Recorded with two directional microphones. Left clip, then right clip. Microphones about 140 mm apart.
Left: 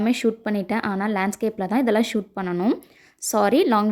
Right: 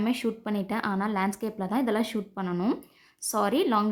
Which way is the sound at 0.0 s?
35° left (ahead or behind).